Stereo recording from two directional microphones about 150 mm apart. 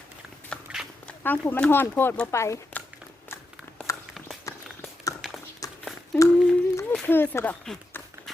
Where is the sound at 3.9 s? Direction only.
20° left (ahead or behind).